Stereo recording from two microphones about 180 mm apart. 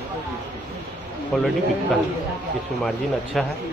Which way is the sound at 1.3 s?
Centre (ahead or behind).